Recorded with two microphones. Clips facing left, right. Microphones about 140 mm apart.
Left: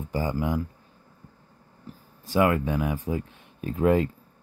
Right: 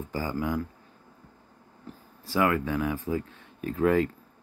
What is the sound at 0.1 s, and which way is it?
Speech, 20° left (ahead or behind).